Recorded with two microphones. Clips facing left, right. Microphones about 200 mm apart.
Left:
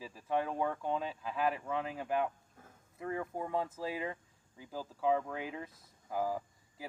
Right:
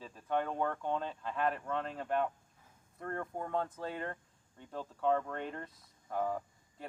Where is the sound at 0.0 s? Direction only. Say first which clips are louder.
Even; 5° left (ahead or behind).